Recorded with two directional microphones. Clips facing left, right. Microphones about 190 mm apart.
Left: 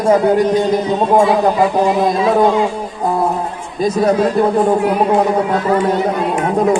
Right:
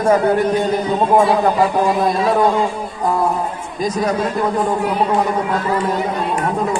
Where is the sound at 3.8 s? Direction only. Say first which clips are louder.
Left 5 dB; 30° left (ahead or behind).